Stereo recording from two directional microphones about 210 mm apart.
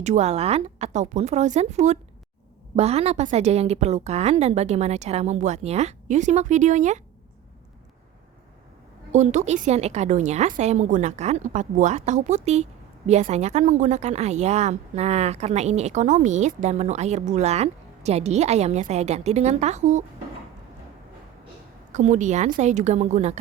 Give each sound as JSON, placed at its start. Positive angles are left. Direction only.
{"t": 0.0, "sound": "a woman's voice", "side_deg": -30}
{"t": 9.1, "sound": "a woman's voice", "side_deg": -35}
{"t": 21.9, "sound": "a woman's voice", "side_deg": -35}